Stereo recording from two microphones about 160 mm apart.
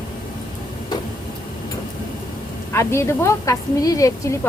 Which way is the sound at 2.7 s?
15° left (ahead or behind).